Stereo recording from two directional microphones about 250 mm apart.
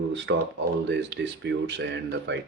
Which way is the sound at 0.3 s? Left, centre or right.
Right.